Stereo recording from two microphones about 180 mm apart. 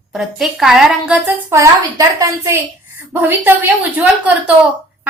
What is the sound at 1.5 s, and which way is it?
Speech, 15° right (ahead or behind).